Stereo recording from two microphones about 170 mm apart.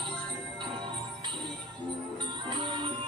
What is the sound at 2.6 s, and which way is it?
Music, 30° right (ahead or behind).